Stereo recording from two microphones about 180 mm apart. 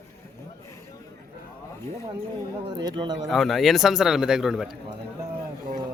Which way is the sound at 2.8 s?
25° right (ahead or behind).